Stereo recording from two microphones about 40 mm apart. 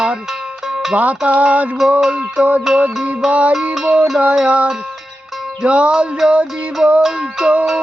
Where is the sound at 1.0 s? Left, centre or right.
Right.